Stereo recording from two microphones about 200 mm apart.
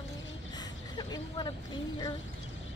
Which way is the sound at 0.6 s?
20° left (ahead or behind).